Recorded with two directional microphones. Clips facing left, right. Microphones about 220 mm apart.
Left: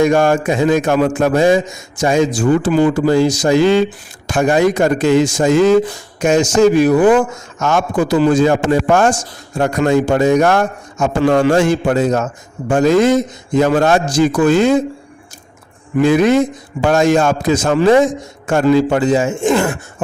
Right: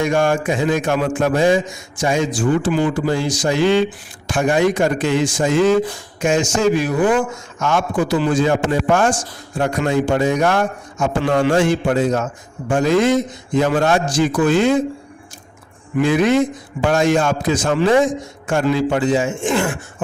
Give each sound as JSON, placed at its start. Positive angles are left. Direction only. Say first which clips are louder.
{"t": 0.0, "sound": "a man's voice", "louder": "left 5 dB", "side_deg": 40}
{"t": 4.9, "sound": "a man's voice", "louder": "left 5 dB", "side_deg": 40}
{"t": 6.9, "sound": "speech", "louder": "left 6 dB", "side_deg": 60}
{"t": 7.6, "sound": "a man's voice", "louder": "left 3 dB", "side_deg": 40}
{"t": 16.0, "sound": "a man's voice", "louder": "left 4 dB", "side_deg": 40}